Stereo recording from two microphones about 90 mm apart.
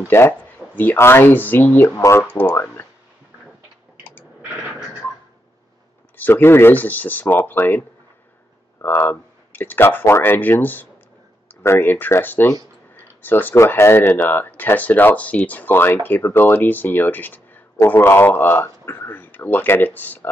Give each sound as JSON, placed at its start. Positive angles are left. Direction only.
{"t": 0.1, "sound": "speech", "side_deg": 25}
{"t": 6.1, "sound": "speech", "side_deg": 20}
{"t": 8.8, "sound": "speech", "side_deg": 25}